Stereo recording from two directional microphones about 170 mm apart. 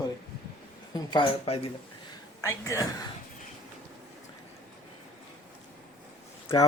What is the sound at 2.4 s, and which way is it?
Speech, 15° left (ahead or behind).